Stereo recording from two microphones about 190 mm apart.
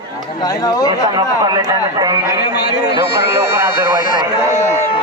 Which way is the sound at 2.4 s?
60° left (ahead or behind).